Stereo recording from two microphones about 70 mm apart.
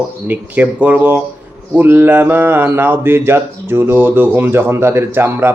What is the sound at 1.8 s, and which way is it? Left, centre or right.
Speech, right.